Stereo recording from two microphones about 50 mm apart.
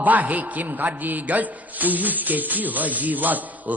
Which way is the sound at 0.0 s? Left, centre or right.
Right.